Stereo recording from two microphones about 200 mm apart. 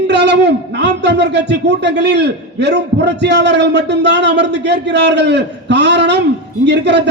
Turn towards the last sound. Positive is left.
turn(degrees=-60)  # may be behind; listen again after turning